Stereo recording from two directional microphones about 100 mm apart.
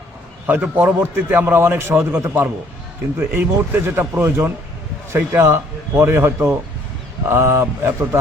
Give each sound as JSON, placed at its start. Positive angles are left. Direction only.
{"t": 0.4, "sound": "a man's voice", "side_deg": -15}